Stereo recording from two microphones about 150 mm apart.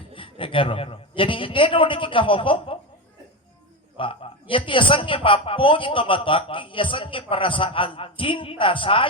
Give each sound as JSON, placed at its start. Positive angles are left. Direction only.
{"t": 0.1, "sound": "a man's voice", "side_deg": 35}
{"t": 3.9, "sound": "a man's voice", "side_deg": 35}